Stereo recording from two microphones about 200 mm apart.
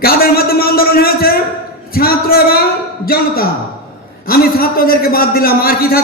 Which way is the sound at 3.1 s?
50° left (ahead or behind).